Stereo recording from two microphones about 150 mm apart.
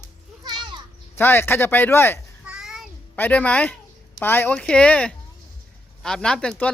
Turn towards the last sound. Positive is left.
turn(degrees=5)  # may be behind; listen again after turning